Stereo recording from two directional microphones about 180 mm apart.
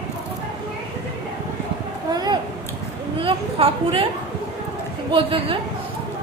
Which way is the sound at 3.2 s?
30° right (ahead or behind).